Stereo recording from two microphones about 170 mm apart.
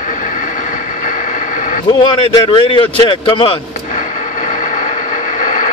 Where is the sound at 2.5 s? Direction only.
30° left (ahead or behind).